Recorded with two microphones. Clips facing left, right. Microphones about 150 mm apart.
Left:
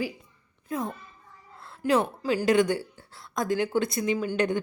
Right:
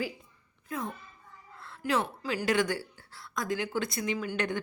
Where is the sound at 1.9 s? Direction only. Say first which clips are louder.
Left 6 dB; 35° left (ahead or behind).